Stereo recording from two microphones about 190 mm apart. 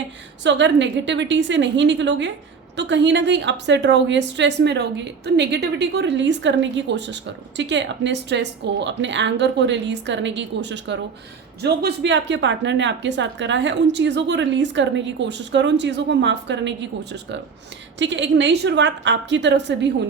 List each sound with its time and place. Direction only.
0.4 s a woman's voice: 70° right (ahead or behind)